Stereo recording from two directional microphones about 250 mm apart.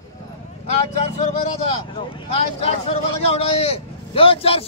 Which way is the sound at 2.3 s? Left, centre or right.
Left.